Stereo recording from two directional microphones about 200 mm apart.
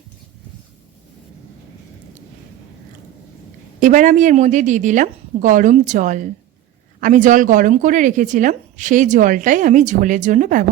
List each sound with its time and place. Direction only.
3.8 s speech: 40° right (ahead or behind)